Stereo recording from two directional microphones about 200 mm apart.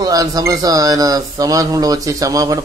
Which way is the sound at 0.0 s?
20° right (ahead or behind).